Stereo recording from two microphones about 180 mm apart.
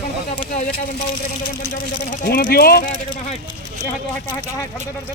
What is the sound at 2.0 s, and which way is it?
Speech, 50° left (ahead or behind).